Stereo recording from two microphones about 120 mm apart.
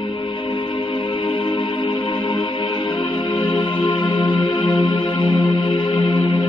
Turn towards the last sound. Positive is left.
turn(degrees=45)  # may be behind; listen again after turning